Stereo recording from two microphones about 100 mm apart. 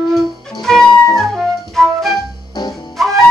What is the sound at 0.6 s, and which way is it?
Music, 5° left (ahead or behind).